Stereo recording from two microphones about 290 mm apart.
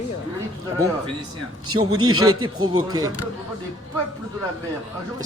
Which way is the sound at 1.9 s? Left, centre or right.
Right.